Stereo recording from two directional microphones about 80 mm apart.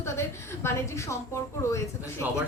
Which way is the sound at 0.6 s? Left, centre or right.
Left.